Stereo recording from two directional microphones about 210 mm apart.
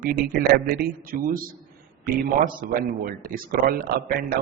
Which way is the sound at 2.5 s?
45° right (ahead or behind).